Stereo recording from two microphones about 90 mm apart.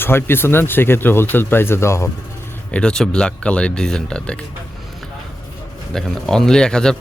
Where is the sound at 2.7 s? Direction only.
10° left (ahead or behind).